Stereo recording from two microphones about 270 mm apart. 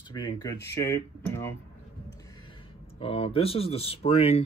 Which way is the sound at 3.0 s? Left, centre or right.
Left.